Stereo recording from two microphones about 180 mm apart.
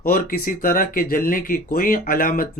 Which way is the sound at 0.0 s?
55° left (ahead or behind).